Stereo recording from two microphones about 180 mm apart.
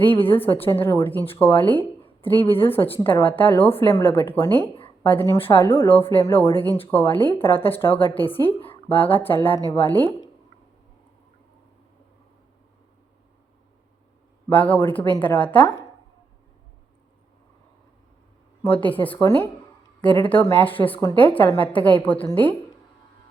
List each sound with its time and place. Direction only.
0.0 s a woman's voice: 10° left (ahead or behind)
8.4 s a woman's voice: 30° left (ahead or behind)
8.9 s a woman's voice: 10° left (ahead or behind)
14.5 s a woman's voice: 10° left (ahead or behind)
18.6 s a woman's voice: 10° left (ahead or behind)